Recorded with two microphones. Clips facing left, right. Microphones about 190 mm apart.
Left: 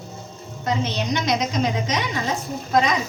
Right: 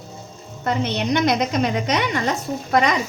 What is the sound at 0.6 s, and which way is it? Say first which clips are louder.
A woman's voice: right 2 dB; 60° right (ahead or behind).